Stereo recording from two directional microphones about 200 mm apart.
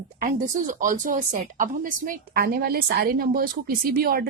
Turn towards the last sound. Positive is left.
turn(degrees=-50)  # may be behind; listen again after turning